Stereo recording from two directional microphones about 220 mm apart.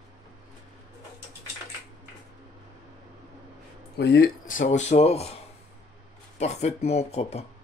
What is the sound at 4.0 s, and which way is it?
Speech, 50° left (ahead or behind).